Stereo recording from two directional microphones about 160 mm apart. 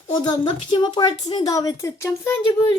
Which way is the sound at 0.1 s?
25° left (ahead or behind).